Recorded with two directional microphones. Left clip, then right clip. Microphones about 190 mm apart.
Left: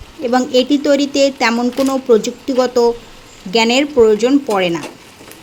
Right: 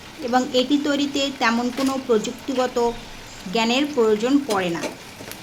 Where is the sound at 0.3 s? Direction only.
25° left (ahead or behind).